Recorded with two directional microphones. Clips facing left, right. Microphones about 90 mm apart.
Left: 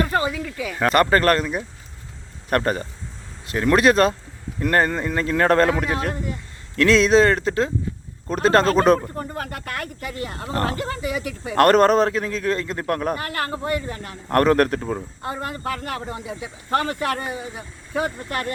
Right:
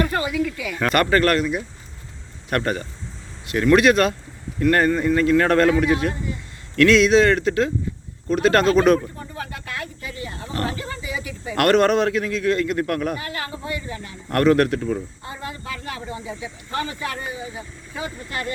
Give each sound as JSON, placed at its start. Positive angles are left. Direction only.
{"t": 0.0, "sound": "a man's voice", "side_deg": 30}
{"t": 9.1, "sound": "speech", "side_deg": 55}
{"t": 11.5, "sound": "a man's voice", "side_deg": 35}
{"t": 13.1, "sound": "speech", "side_deg": 55}
{"t": 14.3, "sound": "a man's voice", "side_deg": 40}